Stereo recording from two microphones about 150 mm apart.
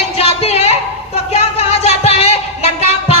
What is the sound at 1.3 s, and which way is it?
Music, 40° left (ahead or behind).